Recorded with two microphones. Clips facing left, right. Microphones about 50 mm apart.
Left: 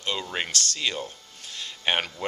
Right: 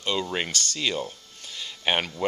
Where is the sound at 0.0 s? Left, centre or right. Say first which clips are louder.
Right 2 dB; centre.